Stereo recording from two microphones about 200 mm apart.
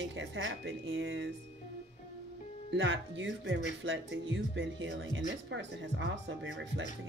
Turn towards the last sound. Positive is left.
turn(degrees=-65)  # may be behind; listen again after turning